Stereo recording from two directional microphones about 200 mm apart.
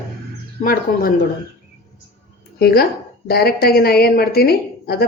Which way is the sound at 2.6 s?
50° left (ahead or behind).